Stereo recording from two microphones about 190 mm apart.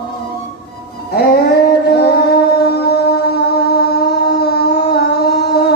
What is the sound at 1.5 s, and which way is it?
Music, 55° left (ahead or behind).